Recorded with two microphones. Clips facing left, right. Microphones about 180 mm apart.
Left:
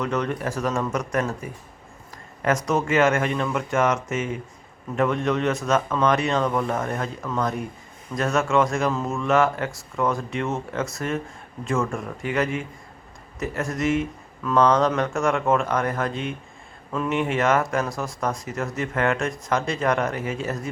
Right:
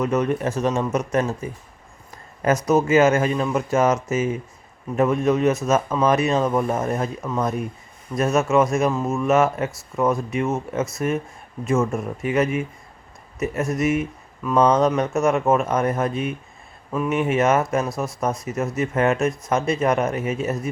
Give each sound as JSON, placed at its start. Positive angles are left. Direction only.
{"t": 0.0, "sound": "speech", "side_deg": -20}
{"t": 2.6, "sound": "speech", "side_deg": -20}